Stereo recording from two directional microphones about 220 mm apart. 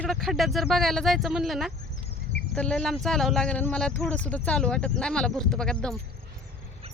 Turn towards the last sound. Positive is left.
turn(degrees=5)  # may be behind; listen again after turning